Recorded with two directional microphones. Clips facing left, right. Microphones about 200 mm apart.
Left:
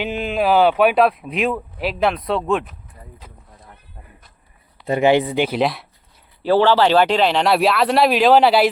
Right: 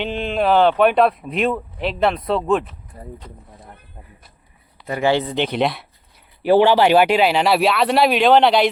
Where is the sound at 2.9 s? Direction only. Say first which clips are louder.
Right 8 dB; 35° right (ahead or behind).